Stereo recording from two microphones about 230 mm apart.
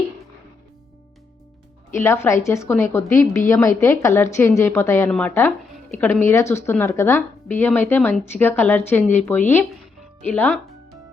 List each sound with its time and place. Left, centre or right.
1.9 s speech: centre
10.2 s speech: centre